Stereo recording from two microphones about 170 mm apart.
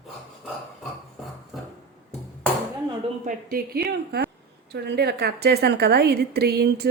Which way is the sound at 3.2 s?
60° right (ahead or behind).